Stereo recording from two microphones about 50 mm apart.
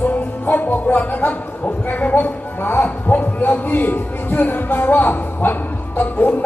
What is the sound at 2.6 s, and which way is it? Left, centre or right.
Speech, left.